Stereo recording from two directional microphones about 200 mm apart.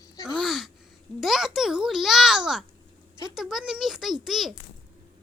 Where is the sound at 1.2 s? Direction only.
Centre (ahead or behind).